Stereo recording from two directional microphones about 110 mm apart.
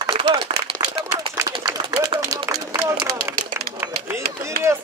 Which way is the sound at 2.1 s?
55° right (ahead or behind).